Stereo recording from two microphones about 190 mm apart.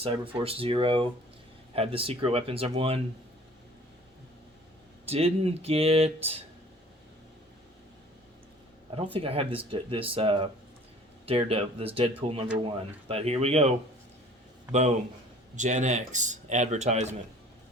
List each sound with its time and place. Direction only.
0.0 s speech: 30° right (ahead or behind)
5.0 s speech: 30° right (ahead or behind)
9.0 s speech: 30° right (ahead or behind)